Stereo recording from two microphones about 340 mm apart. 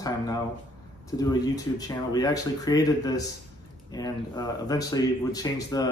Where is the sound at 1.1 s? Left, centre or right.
Centre.